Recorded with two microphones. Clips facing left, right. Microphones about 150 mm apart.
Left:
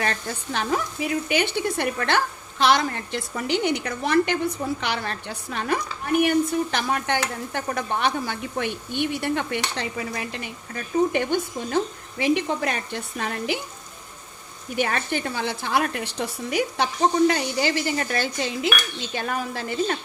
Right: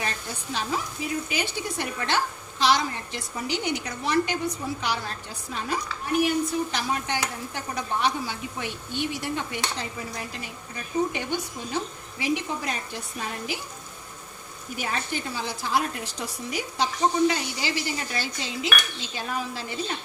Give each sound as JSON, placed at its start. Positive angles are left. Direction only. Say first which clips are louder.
{"t": 0.0, "sound": "frying", "louder": "left 5 dB", "side_deg": 60}
{"t": 11.1, "sound": "speech", "louder": "left 7 dB", "side_deg": 55}
{"t": 12.2, "sound": "frying", "louder": "left 5 dB", "side_deg": 60}
{"t": 14.8, "sound": "frying", "louder": "left 6 dB", "side_deg": 65}